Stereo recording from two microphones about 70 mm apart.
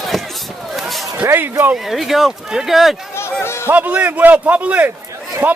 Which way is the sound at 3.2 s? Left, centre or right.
Left.